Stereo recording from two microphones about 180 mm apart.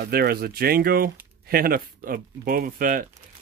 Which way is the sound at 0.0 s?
60° right (ahead or behind).